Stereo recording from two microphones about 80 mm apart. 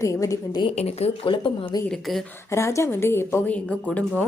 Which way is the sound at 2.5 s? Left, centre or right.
Left.